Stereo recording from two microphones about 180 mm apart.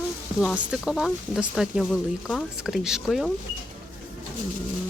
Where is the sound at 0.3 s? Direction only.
5° right (ahead or behind).